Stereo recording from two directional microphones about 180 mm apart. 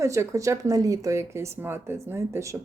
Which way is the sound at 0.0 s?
15° right (ahead or behind).